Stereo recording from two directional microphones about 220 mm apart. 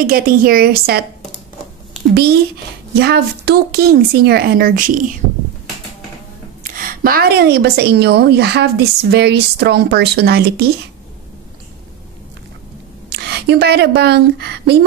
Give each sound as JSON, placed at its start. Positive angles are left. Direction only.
{"t": 0.0, "sound": "a woman's voice", "side_deg": -40}
{"t": 2.9, "sound": "a woman's voice", "side_deg": -45}
{"t": 6.6, "sound": "a woman's voice", "side_deg": -40}
{"t": 13.1, "sound": "speech", "side_deg": -50}